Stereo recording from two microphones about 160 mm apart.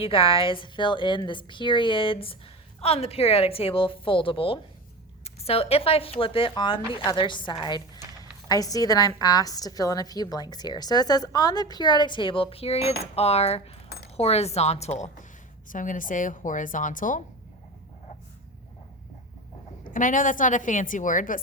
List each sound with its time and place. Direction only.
0.0 s a woman's voice: 35° left (ahead or behind)
15.7 s a woman's voice: 55° left (ahead or behind)
19.8 s a woman's voice: 55° left (ahead or behind)